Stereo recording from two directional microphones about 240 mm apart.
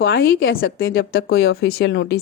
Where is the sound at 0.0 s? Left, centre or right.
Left.